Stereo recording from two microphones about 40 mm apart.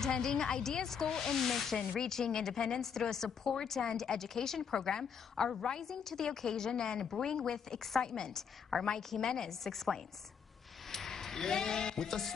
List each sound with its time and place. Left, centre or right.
0.0 s a woman's voice: centre